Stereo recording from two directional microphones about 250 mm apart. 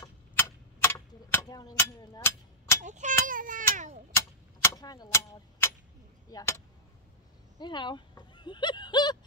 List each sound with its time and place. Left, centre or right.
0.0 s tick-tock: centre
2.8 s speech: right
3.3 s a sound: right
3.7 s speech: right
4.1 s a sound: centre
6.3 s speech: centre